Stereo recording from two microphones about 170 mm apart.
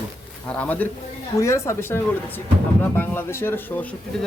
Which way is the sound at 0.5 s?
10° left (ahead or behind).